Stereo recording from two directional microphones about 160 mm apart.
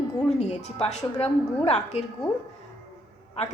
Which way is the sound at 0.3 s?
45° left (ahead or behind).